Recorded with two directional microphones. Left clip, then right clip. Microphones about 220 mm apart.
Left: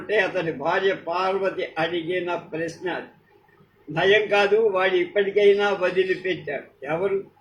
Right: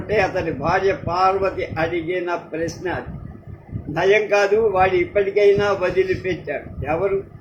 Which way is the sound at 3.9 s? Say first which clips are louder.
Right 2 dB; 15° right (ahead or behind).